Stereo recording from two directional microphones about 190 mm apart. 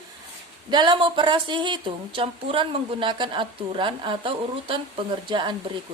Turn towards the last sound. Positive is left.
turn(degrees=-25)  # may be behind; listen again after turning